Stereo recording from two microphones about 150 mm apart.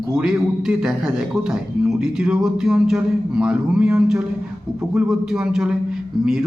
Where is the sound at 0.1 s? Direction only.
5° right (ahead or behind).